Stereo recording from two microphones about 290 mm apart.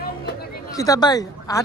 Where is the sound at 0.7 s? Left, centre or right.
Centre.